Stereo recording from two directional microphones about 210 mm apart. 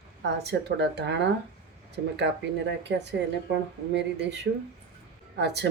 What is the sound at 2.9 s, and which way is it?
Speech, 55° right (ahead or behind).